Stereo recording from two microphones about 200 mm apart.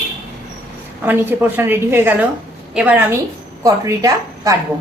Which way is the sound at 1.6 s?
10° right (ahead or behind).